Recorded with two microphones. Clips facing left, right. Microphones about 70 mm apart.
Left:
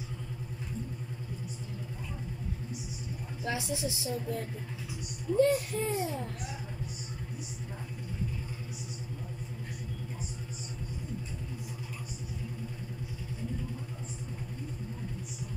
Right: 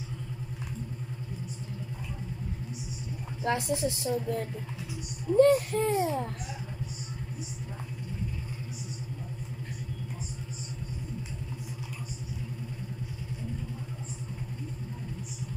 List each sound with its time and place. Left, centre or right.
3.4 s a woman's voice: right
5.4 s a woman's voice: right